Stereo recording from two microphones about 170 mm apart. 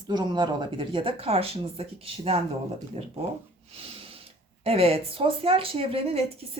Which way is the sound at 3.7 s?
35° right (ahead or behind).